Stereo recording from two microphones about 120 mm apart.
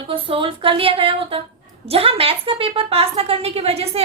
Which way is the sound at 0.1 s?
50° right (ahead or behind).